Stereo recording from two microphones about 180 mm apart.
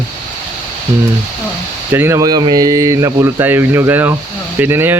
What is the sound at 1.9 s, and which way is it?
Speech, 15° right (ahead or behind).